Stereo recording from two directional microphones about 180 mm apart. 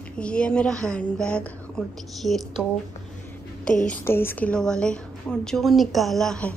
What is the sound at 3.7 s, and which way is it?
A woman's voice, 5° left (ahead or behind).